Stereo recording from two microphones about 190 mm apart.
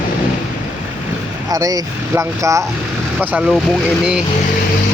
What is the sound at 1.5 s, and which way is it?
Speech, 20° right (ahead or behind).